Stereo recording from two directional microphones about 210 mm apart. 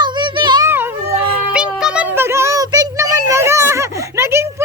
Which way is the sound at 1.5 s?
5° right (ahead or behind).